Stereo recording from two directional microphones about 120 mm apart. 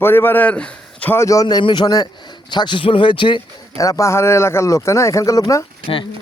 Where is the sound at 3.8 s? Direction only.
25° left (ahead or behind).